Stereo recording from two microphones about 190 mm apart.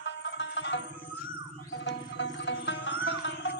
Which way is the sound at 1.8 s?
70° left (ahead or behind).